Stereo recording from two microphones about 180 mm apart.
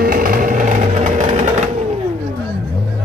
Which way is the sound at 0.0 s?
50° right (ahead or behind).